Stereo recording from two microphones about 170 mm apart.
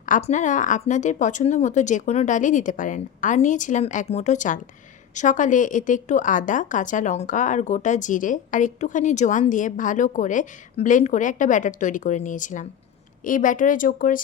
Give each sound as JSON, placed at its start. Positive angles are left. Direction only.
{"t": 0.0, "sound": "a woman's voice", "side_deg": 45}